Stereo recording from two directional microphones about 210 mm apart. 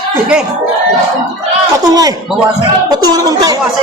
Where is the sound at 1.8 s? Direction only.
15° right (ahead or behind).